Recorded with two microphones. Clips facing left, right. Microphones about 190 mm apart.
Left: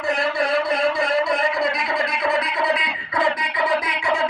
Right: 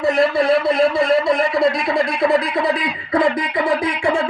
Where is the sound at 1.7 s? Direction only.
30° right (ahead or behind).